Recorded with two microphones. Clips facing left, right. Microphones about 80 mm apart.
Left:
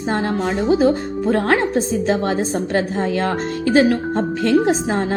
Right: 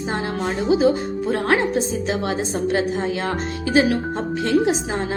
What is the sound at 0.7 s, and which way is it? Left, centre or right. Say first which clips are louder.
A woman's voice: left 1 dB; left.